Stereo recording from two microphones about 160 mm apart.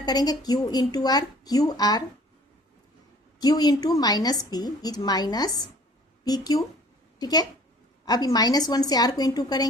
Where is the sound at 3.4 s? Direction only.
25° left (ahead or behind).